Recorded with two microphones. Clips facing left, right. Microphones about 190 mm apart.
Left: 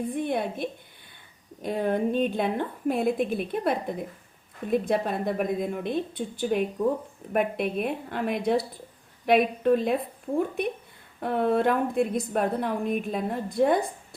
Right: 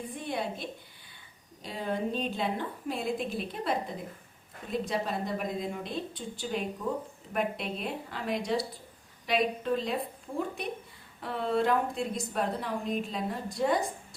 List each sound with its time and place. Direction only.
0.1 s a woman's voice: 55° left (ahead or behind)
11.2 s a woman's voice: 55° left (ahead or behind)